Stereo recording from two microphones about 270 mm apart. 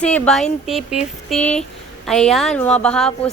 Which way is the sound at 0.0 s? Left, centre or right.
Centre.